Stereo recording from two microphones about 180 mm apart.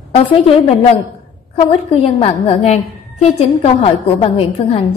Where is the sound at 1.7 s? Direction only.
30° left (ahead or behind).